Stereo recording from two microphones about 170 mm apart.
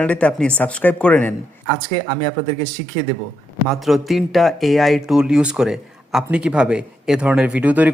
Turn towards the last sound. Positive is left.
turn(degrees=-10)  # may be behind; listen again after turning